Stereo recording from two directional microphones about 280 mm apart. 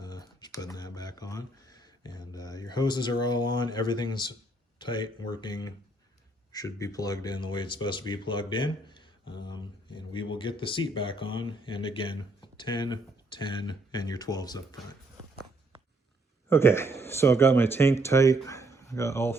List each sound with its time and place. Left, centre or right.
0.0 s speech: centre
16.5 s speech: centre